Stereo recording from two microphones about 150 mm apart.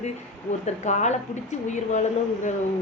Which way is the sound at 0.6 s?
50° left (ahead or behind).